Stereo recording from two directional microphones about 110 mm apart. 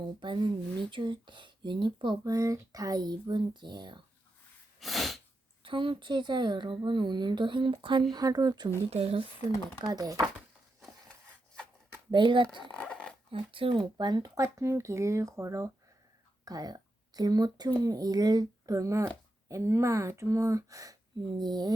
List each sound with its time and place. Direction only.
0.0 s speech: 45° right (ahead or behind)
2.3 s speech: 30° right (ahead or behind)
4.8 s sneeze: centre (ahead or behind)
5.6 s speech: 50° right (ahead or behind)
8.9 s speech: 65° right (ahead or behind)
9.8 s speech: 35° right (ahead or behind)
12.1 s speech: 45° right (ahead or behind)
12.7 s zipper: 10° left (ahead or behind)
13.3 s speech: 50° right (ahead or behind)
13.9 s speech: 40° right (ahead or behind)